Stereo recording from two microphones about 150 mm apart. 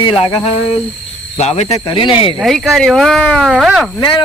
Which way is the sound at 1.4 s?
45° left (ahead or behind).